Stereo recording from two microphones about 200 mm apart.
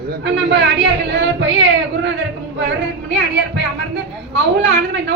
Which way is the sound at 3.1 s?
60° right (ahead or behind).